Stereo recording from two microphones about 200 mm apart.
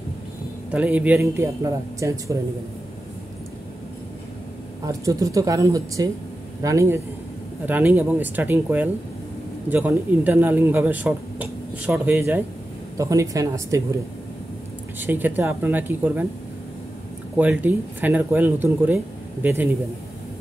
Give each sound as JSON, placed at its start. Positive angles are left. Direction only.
{"t": 0.7, "sound": "a man's voice", "side_deg": -5}
{"t": 4.8, "sound": "a man's voice", "side_deg": -15}
{"t": 15.0, "sound": "a man's voice", "side_deg": -10}
{"t": 17.4, "sound": "a man's voice", "side_deg": -10}